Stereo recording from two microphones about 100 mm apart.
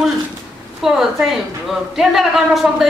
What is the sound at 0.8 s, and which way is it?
A woman's voice, 5° right (ahead or behind).